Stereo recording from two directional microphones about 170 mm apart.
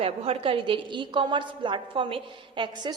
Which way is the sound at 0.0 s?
35° right (ahead or behind).